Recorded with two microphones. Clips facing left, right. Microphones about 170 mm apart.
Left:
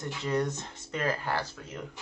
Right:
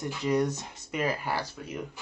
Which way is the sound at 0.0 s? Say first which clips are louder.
Right 3 dB; 10° right (ahead or behind).